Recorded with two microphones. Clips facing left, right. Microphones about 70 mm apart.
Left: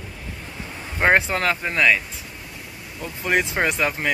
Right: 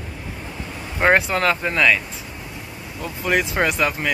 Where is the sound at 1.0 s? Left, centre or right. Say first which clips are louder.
Right 1 dB; left.